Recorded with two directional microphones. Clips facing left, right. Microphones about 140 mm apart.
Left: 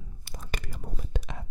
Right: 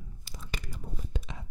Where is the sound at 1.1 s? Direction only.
60° left (ahead or behind).